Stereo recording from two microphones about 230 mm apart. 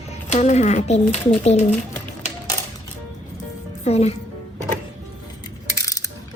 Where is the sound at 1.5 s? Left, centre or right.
Left.